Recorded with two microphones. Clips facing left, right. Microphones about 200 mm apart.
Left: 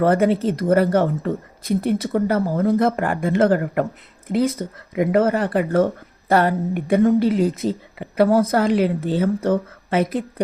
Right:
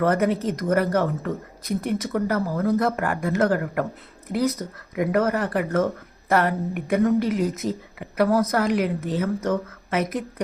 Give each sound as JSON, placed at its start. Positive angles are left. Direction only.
{"t": 0.0, "sound": "speech", "side_deg": 30}